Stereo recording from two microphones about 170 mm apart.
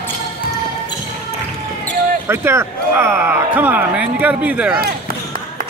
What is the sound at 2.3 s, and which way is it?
Speech, 15° right (ahead or behind).